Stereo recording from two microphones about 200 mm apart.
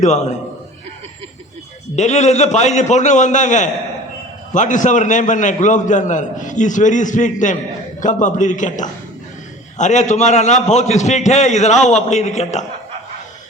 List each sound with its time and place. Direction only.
0.0 s a man's voice: 35° left (ahead or behind)
2.0 s a man's voice: 35° left (ahead or behind)